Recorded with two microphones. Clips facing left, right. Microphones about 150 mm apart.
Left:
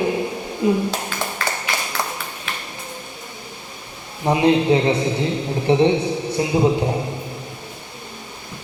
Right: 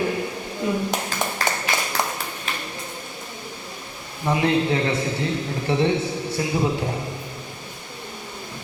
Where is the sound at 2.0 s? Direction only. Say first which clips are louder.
Right 1 dB; 20° right (ahead or behind).